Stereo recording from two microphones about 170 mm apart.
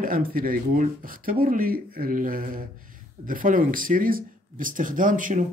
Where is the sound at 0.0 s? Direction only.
55° right (ahead or behind).